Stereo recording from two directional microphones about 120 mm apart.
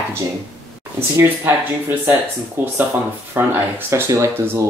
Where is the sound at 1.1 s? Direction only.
20° right (ahead or behind).